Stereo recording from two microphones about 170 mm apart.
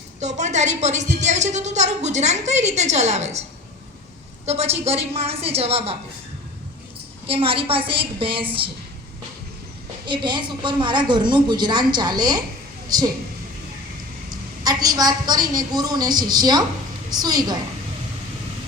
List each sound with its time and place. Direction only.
0.2 s a woman's voice: 45° right (ahead or behind)
4.4 s a woman's voice: 35° right (ahead or behind)
7.3 s a woman's voice: 35° right (ahead or behind)
10.1 s a woman's voice: 25° right (ahead or behind)
14.6 s a woman's voice: 25° right (ahead or behind)